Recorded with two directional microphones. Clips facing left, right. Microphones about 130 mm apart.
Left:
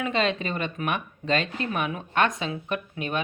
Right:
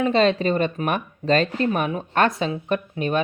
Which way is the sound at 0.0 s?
35° right (ahead or behind).